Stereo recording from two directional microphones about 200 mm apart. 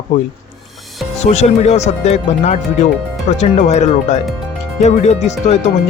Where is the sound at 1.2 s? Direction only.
35° left (ahead or behind).